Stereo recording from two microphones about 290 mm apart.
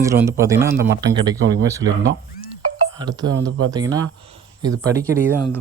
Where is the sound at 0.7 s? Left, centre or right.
Right.